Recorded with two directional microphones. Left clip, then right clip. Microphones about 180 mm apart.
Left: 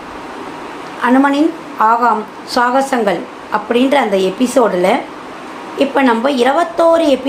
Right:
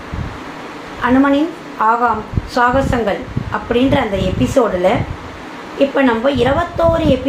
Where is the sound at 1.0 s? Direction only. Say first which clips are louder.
Left 2 dB; 45° left (ahead or behind).